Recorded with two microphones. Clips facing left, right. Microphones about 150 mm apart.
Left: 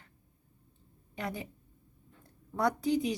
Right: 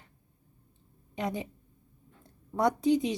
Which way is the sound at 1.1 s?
20° right (ahead or behind).